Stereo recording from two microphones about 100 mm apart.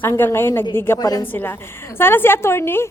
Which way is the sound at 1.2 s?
20° left (ahead or behind).